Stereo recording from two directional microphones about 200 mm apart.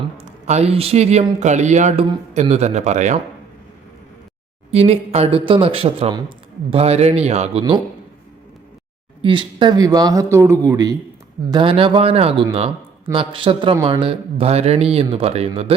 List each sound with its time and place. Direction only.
0.2 s speech: 35° right (ahead or behind)
4.7 s speech: 30° right (ahead or behind)
9.2 s a man's voice: 25° right (ahead or behind)